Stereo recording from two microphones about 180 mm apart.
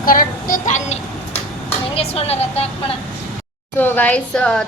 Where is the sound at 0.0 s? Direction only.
50° left (ahead or behind).